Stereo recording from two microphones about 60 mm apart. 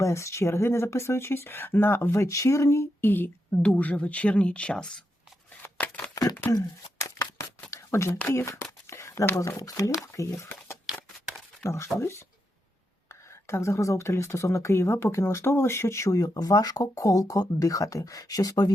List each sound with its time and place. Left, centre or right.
0.0 s a woman's voice: left
3.0 s speech: left
3.6 s speech: left
5.8 s a sound: left
6.2 s a sound: left
7.0 s shuffling cards: left
7.9 s a woman's voice: left
8.9 s a sound: left
9.6 s speech: left
10.2 s a woman's voice: left
11.6 s a woman's voice: left
16.1 s speech: left